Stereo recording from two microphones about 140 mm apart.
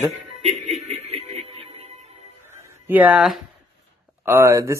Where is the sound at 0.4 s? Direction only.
50° right (ahead or behind).